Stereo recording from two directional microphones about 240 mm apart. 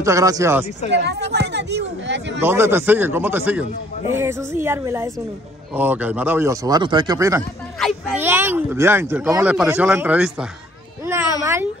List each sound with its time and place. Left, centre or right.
0.0 s speech: centre
0.8 s speech: right
2.4 s speech: centre
11.4 s a sound: centre